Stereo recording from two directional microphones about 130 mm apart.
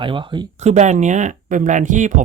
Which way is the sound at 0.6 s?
65° right (ahead or behind).